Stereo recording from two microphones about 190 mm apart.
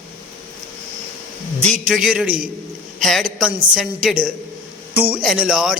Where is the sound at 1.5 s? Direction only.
35° right (ahead or behind).